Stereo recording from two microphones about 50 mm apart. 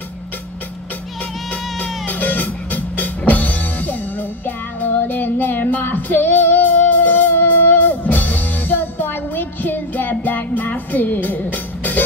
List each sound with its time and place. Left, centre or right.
1.8 s music: left